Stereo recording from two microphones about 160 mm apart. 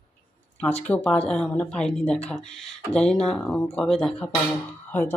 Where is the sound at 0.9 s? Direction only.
10° left (ahead or behind).